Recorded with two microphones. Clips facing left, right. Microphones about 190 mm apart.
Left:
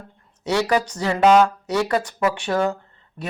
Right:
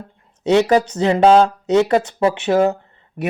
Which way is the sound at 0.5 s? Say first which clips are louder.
Right 6 dB; 20° right (ahead or behind).